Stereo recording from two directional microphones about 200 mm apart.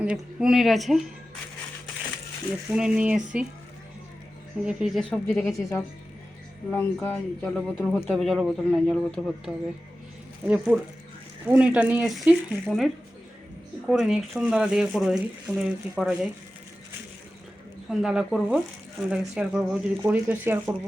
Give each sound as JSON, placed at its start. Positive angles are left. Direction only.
{"t": 0.0, "sound": "a man's voice", "side_deg": -5}
{"t": 2.6, "sound": "a man's voice", "side_deg": -5}
{"t": 4.6, "sound": "a man's voice", "side_deg": 0}
{"t": 5.4, "sound": "a man's voice", "side_deg": 15}
{"t": 17.8, "sound": "a man's voice", "side_deg": -5}